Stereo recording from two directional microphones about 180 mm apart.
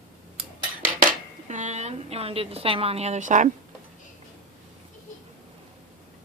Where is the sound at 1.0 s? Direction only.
40° right (ahead or behind).